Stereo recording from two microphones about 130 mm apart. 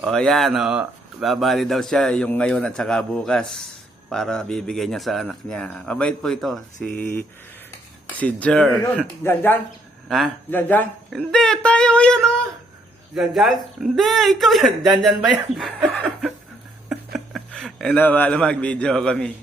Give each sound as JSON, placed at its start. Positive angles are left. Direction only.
{"t": 0.0, "sound": "speech", "side_deg": 5}
{"t": 10.1, "sound": "speech", "side_deg": 0}
{"t": 10.5, "sound": "speech", "side_deg": 15}
{"t": 16.9, "sound": "a man's voice", "side_deg": 0}